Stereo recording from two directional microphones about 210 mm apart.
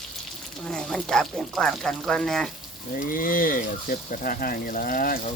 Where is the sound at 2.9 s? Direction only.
40° left (ahead or behind).